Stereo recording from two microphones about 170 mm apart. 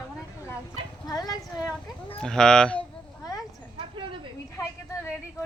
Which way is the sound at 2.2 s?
5° left (ahead or behind).